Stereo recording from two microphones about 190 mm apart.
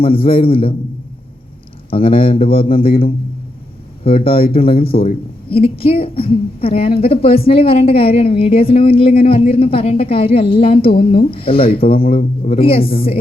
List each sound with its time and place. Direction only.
0.0 s speech: 30° left (ahead or behind)
1.9 s speech: 30° left (ahead or behind)